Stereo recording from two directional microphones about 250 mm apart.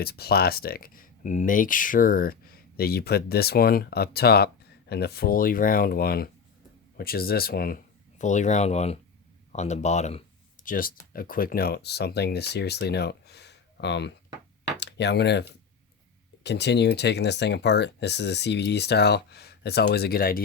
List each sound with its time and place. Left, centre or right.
0.0 s speech: left